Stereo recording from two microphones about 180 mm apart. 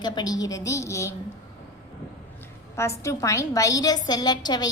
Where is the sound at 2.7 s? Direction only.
15° left (ahead or behind).